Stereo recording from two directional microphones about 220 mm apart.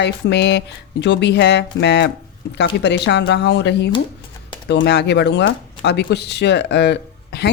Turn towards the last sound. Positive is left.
turn(degrees=50)  # may be behind; listen again after turning